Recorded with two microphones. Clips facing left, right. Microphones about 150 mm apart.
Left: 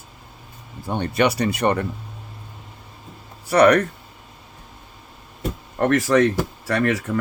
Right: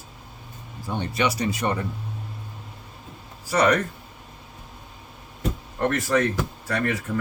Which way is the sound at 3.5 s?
65° left (ahead or behind).